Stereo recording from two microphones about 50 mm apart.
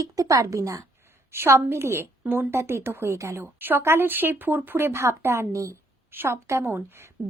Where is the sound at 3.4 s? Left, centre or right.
Right.